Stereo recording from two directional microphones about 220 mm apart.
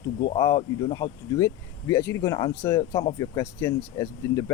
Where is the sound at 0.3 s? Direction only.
15° left (ahead or behind).